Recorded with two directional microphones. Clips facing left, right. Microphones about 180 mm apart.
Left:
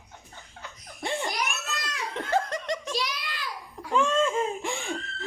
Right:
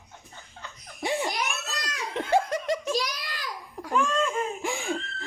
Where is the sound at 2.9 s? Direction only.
40° right (ahead or behind).